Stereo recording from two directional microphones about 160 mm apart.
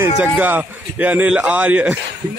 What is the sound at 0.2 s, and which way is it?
A man's voice, 10° right (ahead or behind).